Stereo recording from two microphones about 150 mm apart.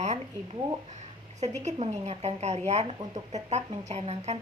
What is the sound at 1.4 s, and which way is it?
A woman's voice, 50° right (ahead or behind).